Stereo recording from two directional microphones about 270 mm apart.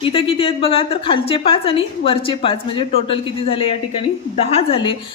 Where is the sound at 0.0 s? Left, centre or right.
Centre.